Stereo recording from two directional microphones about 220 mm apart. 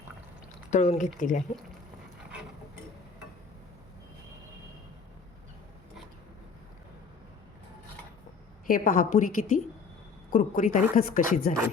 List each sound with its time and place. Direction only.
0.7 s a woman's voice: 35° left (ahead or behind)
8.6 s a woman's voice: 40° left (ahead or behind)